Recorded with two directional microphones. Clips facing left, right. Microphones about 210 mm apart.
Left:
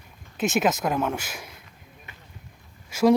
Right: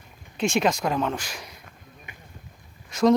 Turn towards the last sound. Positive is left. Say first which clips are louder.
# even
turn(degrees=10)  # may be behind; listen again after turning